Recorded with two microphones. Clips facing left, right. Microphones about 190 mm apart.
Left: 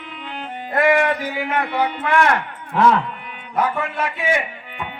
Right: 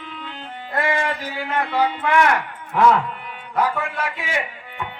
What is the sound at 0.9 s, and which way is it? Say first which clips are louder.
Speech: left 6 dB; 55° left (ahead or behind).